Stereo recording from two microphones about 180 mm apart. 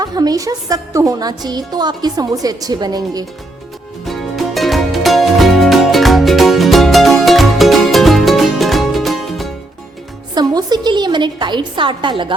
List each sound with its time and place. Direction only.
0.0 s speech: 20° right (ahead or behind)
4.0 s music: centre (ahead or behind)
10.3 s a woman's voice: 20° right (ahead or behind)